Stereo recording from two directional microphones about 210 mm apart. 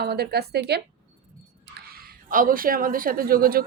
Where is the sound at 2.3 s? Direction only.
40° right (ahead or behind).